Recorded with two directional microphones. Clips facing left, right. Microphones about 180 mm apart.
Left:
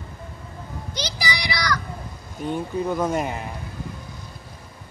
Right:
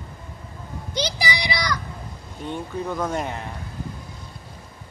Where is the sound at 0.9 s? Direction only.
20° right (ahead or behind).